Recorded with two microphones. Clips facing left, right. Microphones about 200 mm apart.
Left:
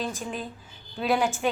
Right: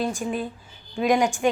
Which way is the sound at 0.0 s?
10° right (ahead or behind).